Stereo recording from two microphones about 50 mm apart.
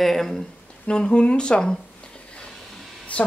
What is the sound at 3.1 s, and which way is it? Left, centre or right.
Speech, left.